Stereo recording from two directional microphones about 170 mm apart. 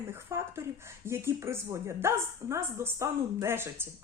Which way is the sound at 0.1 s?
15° right (ahead or behind).